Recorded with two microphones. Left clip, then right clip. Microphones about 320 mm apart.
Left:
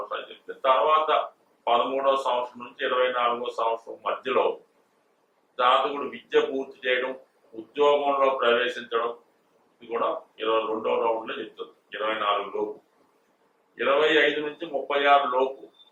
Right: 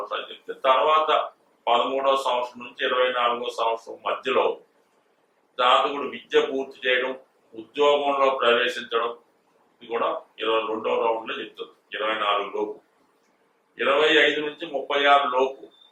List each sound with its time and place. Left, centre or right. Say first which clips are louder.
0.1 s a sound: right 3 dB; centre
0.7 s a man's voice: right 2 dB; centre
5.6 s speech: right 2 dB; centre
12.5 s speech: right 1 dB; left
13.7 s speech: right 2 dB; centre